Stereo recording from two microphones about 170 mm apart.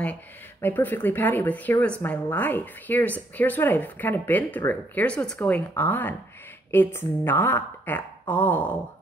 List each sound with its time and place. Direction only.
0.0 s speech: 10° left (ahead or behind)